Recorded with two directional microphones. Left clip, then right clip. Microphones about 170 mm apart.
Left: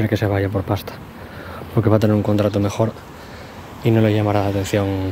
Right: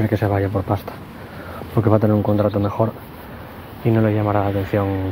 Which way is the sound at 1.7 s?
35° left (ahead or behind).